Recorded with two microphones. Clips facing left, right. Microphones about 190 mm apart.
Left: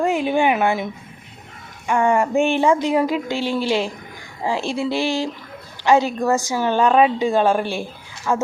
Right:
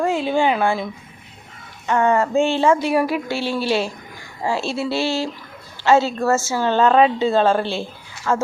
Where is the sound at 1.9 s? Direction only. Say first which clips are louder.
Even; 15° left (ahead or behind).